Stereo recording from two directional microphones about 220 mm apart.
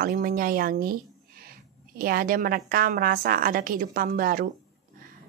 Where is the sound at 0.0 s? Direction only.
40° right (ahead or behind).